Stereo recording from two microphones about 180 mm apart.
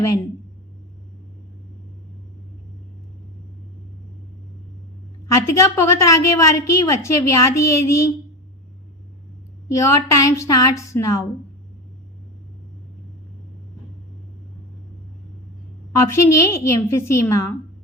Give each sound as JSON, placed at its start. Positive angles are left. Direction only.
{"t": 5.3, "sound": "a woman's voice", "side_deg": 15}
{"t": 9.7, "sound": "a woman's voice", "side_deg": 15}
{"t": 16.0, "sound": "a woman's voice", "side_deg": 15}